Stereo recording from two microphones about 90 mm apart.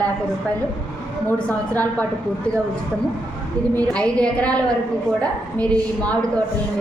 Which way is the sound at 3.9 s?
10° left (ahead or behind).